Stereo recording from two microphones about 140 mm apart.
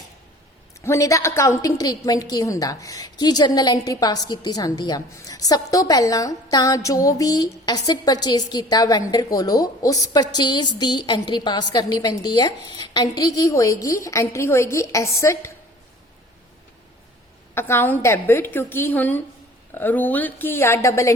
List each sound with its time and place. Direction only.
0.9 s a woman's voice: 20° left (ahead or behind)
17.5 s a woman's voice: 15° left (ahead or behind)